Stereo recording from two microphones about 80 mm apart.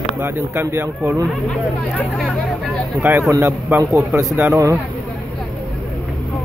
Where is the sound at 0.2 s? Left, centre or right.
Right.